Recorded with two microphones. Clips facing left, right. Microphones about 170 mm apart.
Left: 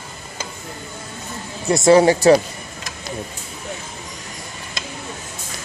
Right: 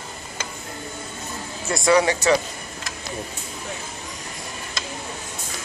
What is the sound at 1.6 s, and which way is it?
Speech, 25° left (ahead or behind).